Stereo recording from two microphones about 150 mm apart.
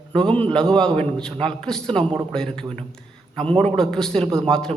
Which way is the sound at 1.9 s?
35° right (ahead or behind).